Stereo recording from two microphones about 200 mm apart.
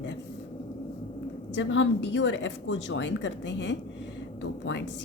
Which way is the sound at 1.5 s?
65° left (ahead or behind).